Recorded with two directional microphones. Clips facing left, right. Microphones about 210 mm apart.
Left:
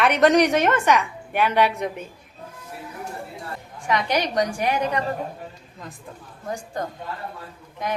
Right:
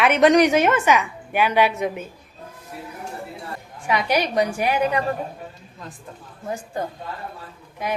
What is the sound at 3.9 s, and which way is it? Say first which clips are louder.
A woman's voice: right 1 dB; 10° right (ahead or behind).